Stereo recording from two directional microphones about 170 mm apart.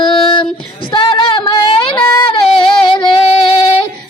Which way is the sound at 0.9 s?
30° left (ahead or behind).